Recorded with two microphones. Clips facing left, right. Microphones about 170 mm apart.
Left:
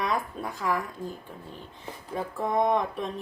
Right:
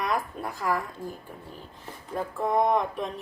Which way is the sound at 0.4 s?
15° right (ahead or behind).